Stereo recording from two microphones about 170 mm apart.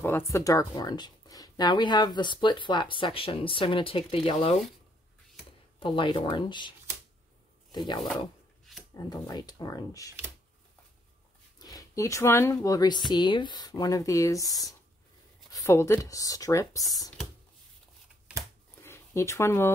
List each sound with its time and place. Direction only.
0.0 s speech: 15° left (ahead or behind); by 4.6 s 35° left (ahead or behind)
5.8 s speech: 30° left (ahead or behind)
7.7 s speech: 25° left (ahead or behind)
11.5 s speech: 20° left (ahead or behind)
18.8 s a sound: 15° left (ahead or behind)